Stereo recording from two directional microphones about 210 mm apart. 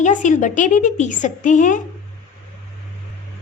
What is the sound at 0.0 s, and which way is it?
Speech, 35° left (ahead or behind).